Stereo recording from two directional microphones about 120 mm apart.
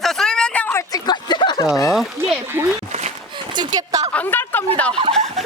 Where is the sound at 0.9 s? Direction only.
35° left (ahead or behind).